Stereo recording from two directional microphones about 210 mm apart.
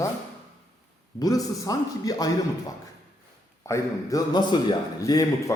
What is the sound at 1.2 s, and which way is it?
A man's voice, 15° left (ahead or behind).